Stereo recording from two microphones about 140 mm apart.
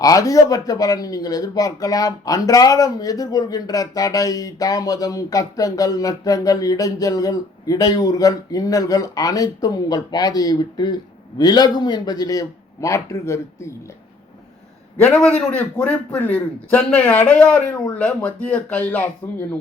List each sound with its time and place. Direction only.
0.0 s speech: 25° left (ahead or behind)
15.2 s a man's voice: 5° left (ahead or behind)